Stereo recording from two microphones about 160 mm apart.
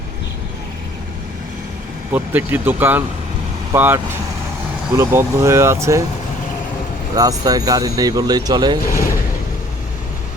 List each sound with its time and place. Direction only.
2.1 s speech: 10° right (ahead or behind)
7.2 s speech: 25° right (ahead or behind)
8.8 s speech: 65° left (ahead or behind)